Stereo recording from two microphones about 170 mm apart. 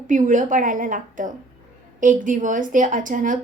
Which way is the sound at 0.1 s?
50° right (ahead or behind).